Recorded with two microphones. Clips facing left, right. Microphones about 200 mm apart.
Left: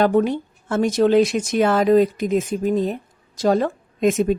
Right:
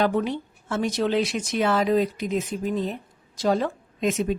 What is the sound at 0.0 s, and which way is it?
Speech, 45° left (ahead or behind).